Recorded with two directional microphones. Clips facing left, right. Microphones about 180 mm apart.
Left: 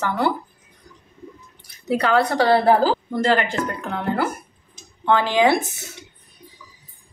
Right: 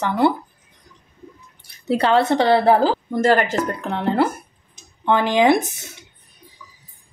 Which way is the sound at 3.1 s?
40° right (ahead or behind).